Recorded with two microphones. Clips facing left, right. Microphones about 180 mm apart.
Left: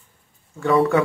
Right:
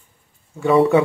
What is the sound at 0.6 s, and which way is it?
Speech, 20° right (ahead or behind).